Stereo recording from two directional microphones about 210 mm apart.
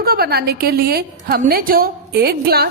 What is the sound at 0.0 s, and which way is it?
A woman's voice, 45° right (ahead or behind).